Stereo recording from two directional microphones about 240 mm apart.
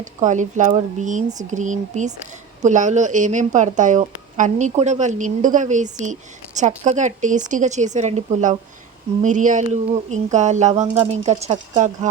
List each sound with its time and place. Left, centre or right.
0.0 s speech: right